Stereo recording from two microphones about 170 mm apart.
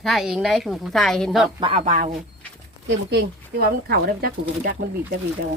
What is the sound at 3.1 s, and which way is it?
Speech, 75° right (ahead or behind).